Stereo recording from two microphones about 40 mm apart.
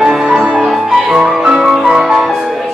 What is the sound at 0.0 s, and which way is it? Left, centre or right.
Music, centre.